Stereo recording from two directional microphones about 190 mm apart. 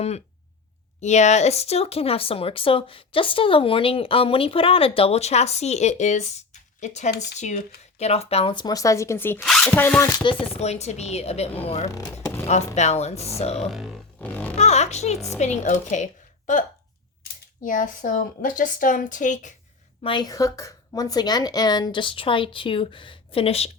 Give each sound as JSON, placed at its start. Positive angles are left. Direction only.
{"t": 1.0, "sound": "speech", "side_deg": 35}
{"t": 10.2, "sound": "speech", "side_deg": 30}
{"t": 11.9, "sound": "speech", "side_deg": 15}
{"t": 12.5, "sound": "speech", "side_deg": 35}
{"t": 13.7, "sound": "a sound", "side_deg": 0}
{"t": 14.5, "sound": "speech", "side_deg": 35}
{"t": 17.6, "sound": "a woman's voice", "side_deg": 45}
{"t": 20.0, "sound": "speech", "side_deg": 25}